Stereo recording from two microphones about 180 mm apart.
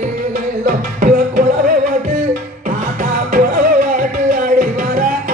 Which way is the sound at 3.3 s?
50° right (ahead or behind).